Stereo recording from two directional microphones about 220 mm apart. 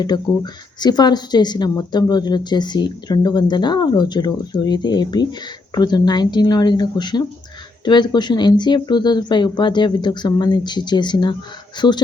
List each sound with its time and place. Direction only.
0.0 s speech: 20° left (ahead or behind)